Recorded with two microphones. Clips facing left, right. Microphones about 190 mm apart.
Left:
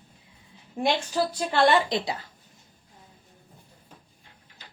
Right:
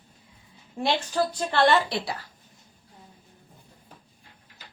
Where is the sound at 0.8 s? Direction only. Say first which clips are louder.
Even; 10° left (ahead or behind).